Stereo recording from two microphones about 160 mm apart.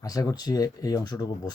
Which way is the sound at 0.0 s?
20° left (ahead or behind).